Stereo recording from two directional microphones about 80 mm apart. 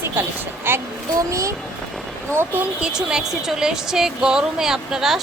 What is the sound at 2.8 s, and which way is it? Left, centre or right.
Speech, centre.